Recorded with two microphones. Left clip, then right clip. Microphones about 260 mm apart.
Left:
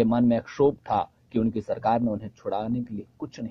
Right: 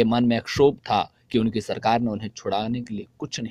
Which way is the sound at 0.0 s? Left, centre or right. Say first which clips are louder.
Right 2 dB; right.